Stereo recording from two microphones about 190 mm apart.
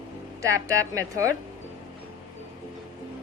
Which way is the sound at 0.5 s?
15° right (ahead or behind).